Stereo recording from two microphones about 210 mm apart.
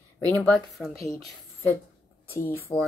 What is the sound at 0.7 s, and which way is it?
Speech, centre (ahead or behind).